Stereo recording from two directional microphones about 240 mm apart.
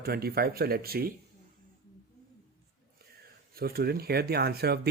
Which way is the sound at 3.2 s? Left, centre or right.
Right.